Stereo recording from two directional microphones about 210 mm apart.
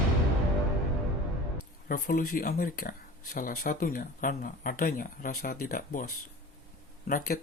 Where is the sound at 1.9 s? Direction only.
40° left (ahead or behind).